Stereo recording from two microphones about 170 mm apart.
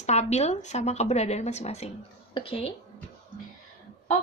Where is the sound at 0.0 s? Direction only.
40° left (ahead or behind).